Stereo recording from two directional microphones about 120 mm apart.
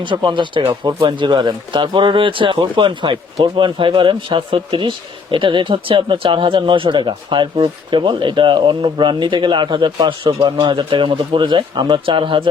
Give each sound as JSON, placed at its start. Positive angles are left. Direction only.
{"t": 0.0, "sound": "speech", "side_deg": -40}